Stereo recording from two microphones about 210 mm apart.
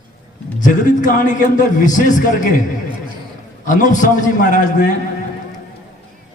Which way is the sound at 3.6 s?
40° left (ahead or behind).